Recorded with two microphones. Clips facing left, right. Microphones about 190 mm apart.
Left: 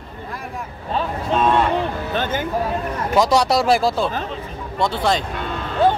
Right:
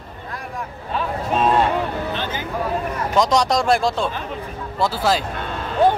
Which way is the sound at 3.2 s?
5° left (ahead or behind).